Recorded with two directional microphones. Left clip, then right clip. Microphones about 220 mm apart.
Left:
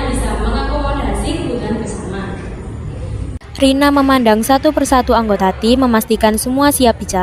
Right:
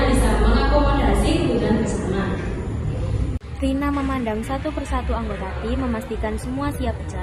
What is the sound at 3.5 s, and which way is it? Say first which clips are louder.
A woman's voice: left 12 dB; 45° left (ahead or behind).